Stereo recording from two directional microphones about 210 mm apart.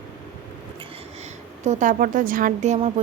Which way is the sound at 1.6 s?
35° right (ahead or behind).